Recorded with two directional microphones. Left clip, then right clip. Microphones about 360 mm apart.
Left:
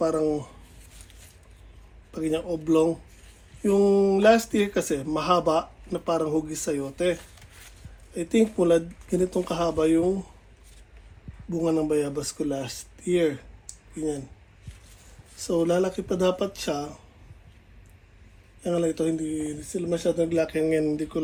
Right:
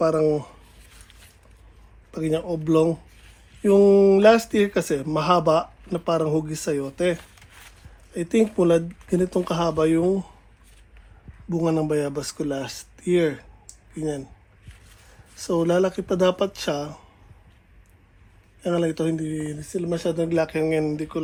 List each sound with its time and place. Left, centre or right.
0.0 s speech: right
2.1 s speech: right
11.4 s speech: right
15.4 s speech: centre
18.6 s speech: centre